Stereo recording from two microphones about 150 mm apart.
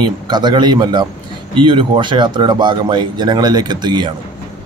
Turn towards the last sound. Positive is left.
turn(degrees=-30)  # may be behind; listen again after turning